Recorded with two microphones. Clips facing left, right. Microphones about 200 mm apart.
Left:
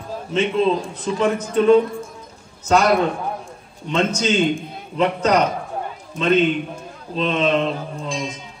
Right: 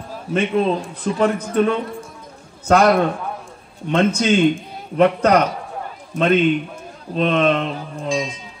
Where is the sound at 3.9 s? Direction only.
60° right (ahead or behind).